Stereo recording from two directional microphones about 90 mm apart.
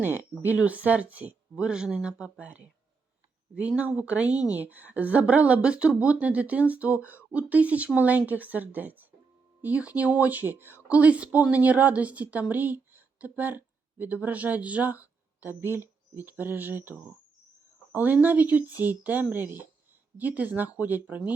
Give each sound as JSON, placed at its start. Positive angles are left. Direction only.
{"t": 0.0, "sound": "a woman's voice", "side_deg": -20}